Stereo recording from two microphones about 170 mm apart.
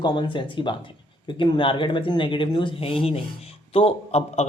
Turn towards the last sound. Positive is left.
turn(degrees=40)  # may be behind; listen again after turning